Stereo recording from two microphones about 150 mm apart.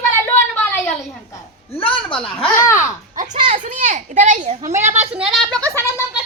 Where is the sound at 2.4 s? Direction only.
15° left (ahead or behind).